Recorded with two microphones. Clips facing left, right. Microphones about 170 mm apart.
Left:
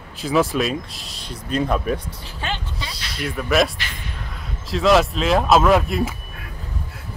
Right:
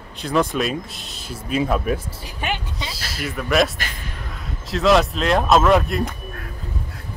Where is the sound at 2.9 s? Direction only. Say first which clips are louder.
Left 2 dB; centre (ahead or behind).